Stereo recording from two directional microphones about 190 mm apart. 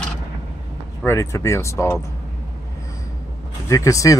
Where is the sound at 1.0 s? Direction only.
15° left (ahead or behind).